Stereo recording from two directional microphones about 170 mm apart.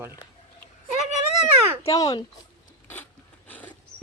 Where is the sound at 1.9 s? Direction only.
20° left (ahead or behind).